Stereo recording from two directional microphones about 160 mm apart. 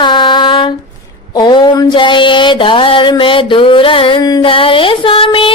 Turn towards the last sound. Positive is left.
turn(degrees=35)  # may be behind; listen again after turning